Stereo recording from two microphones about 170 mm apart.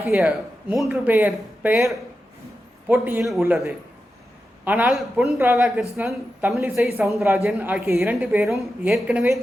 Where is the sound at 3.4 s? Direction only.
10° right (ahead or behind).